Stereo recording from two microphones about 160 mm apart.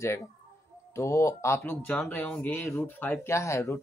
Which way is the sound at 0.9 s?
20° left (ahead or behind).